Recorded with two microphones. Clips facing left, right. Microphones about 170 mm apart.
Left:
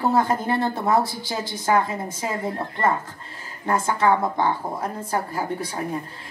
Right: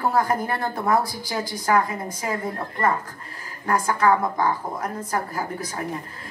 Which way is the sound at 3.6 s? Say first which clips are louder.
Even; 25° left (ahead or behind).